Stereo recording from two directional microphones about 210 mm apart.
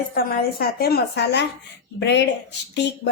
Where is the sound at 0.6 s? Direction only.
45° left (ahead or behind).